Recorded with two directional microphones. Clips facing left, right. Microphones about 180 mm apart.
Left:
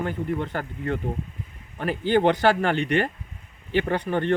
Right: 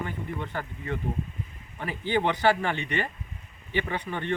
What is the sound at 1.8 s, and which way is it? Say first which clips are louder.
Speech: left 6 dB; 70° left (ahead or behind).